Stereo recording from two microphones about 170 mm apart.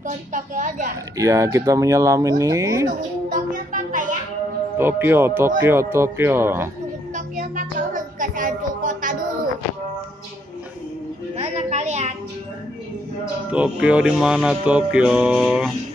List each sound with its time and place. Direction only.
0.0 s a woman's voice: 50° right (ahead or behind)
1.1 s speech: 20° right (ahead or behind)
3.3 s music: 50° right (ahead or behind)
4.7 s speech: 10° right (ahead or behind)
7.2 s a sound: 50° right (ahead or behind)
11.3 s music: 40° right (ahead or behind)
13.5 s music: 5° right (ahead or behind)